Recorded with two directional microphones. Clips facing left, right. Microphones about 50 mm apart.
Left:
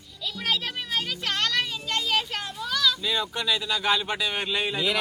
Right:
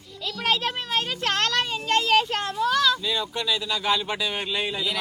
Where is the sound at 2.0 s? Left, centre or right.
Right.